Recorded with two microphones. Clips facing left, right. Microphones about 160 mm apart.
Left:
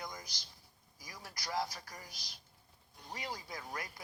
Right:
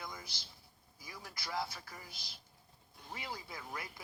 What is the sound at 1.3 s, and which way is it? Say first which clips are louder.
Speech: left 2 dB; 5° right (ahead or behind).